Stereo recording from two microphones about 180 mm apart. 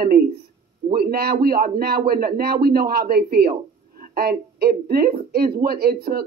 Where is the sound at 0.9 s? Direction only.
60° right (ahead or behind).